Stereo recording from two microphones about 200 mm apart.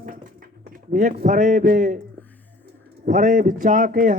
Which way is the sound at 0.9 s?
40° right (ahead or behind).